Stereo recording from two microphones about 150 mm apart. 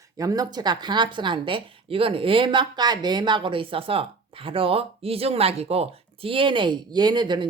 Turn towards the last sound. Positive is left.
turn(degrees=-30)  # may be behind; listen again after turning